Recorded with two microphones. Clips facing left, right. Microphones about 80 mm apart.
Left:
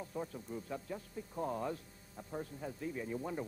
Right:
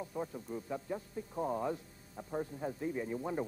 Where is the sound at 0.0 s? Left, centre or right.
Centre.